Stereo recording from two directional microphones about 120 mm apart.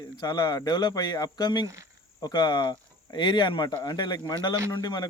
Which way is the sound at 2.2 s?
35° left (ahead or behind).